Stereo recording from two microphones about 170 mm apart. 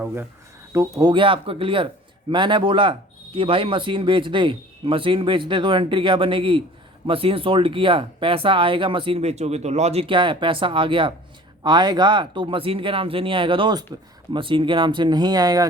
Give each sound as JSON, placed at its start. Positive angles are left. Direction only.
{"t": 0.0, "sound": "speech", "side_deg": -15}